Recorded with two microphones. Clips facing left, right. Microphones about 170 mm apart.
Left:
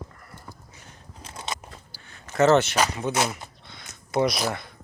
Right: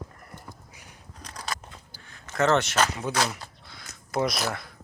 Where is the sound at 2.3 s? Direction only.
5° left (ahead or behind).